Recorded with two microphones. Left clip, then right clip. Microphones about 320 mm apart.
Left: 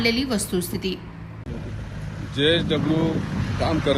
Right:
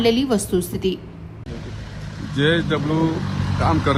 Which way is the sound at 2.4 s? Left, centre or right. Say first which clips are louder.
Right 1 dB; centre.